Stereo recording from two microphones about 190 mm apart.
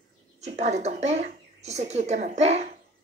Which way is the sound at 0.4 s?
35° right (ahead or behind).